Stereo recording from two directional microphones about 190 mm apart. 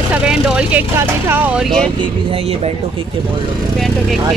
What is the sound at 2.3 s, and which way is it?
Speech, 30° right (ahead or behind).